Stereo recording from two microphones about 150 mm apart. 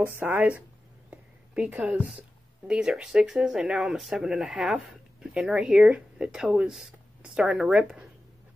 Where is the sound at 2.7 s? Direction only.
5° right (ahead or behind).